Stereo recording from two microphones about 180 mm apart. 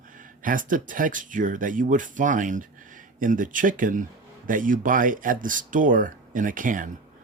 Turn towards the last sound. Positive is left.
turn(degrees=-50)  # may be behind; listen again after turning